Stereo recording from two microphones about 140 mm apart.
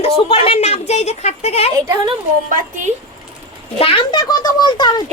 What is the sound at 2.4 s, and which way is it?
Speech, 75° right (ahead or behind).